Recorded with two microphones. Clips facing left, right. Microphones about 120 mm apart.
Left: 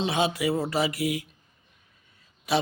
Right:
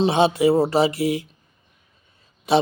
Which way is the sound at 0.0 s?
30° right (ahead or behind).